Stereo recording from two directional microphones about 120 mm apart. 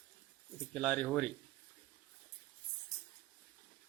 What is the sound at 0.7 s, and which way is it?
Speech, 5° left (ahead or behind).